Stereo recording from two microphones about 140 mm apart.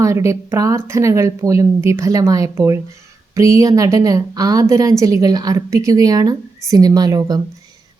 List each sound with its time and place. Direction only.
0.0 s a woman's voice: 20° right (ahead or behind)